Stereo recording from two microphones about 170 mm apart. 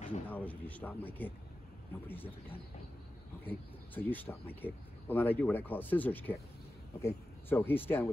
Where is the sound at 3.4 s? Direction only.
10° left (ahead or behind).